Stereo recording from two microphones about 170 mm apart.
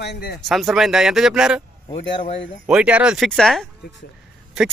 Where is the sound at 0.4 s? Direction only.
Centre (ahead or behind).